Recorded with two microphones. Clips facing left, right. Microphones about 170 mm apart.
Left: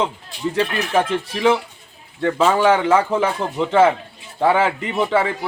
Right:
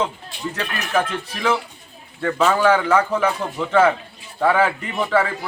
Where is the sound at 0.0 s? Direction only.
30° left (ahead or behind).